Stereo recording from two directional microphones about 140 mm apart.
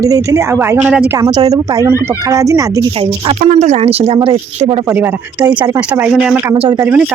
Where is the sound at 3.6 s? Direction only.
50° right (ahead or behind).